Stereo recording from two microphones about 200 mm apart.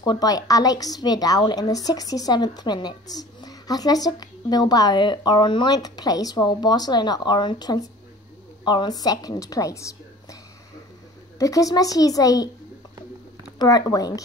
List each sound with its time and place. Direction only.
0.0 s a woman's voice: 20° left (ahead or behind)
11.3 s a woman's voice: 15° left (ahead or behind)
13.6 s a woman's voice: 20° left (ahead or behind)